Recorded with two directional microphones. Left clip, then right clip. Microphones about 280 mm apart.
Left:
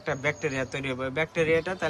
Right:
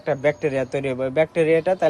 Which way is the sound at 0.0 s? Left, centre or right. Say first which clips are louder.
Right 7 dB; centre.